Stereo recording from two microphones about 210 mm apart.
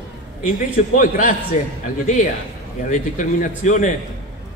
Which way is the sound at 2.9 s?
35° left (ahead or behind).